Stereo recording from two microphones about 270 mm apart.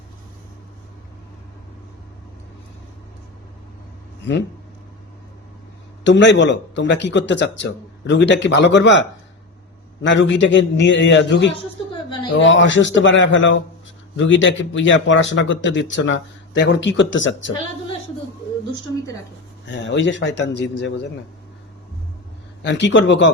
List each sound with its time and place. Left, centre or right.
6.1 s speech: left
12.0 s a sound: centre
12.3 s speech: left
19.6 s speech: left
22.6 s speech: left